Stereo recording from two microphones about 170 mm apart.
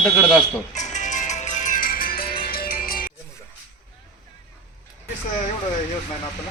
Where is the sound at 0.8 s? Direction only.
45° left (ahead or behind).